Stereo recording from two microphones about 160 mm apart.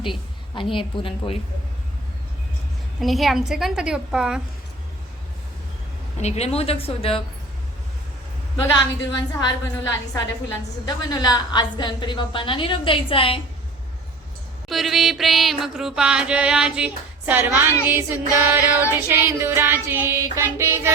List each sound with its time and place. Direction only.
0.5 s a woman's voice: 30° left (ahead or behind)
3.0 s music: centre (ahead or behind)
6.1 s a woman's voice: 45° left (ahead or behind)
8.7 s a woman's voice: 25° left (ahead or behind)
14.7 s music: centre (ahead or behind)